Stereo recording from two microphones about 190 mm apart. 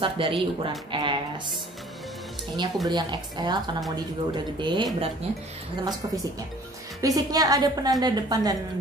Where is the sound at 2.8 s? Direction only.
20° right (ahead or behind).